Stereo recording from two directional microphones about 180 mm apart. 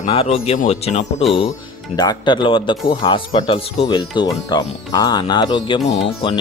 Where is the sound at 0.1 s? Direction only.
30° left (ahead or behind).